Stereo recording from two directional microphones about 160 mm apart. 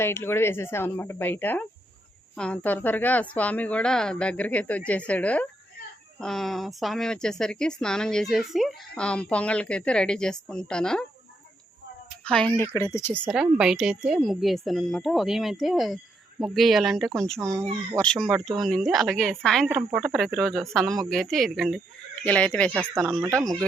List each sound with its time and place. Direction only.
0.0 s a woman's voice: 15° left (ahead or behind)
12.2 s speech: 5° left (ahead or behind)
12.7 s a woman's voice: 20° left (ahead or behind)
13.3 s a woman's voice: 5° right (ahead or behind)
23.2 s speech: 20° right (ahead or behind)